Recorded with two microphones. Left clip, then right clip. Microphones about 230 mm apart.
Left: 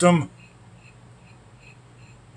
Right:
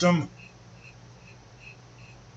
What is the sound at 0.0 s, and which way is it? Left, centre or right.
Speech, left.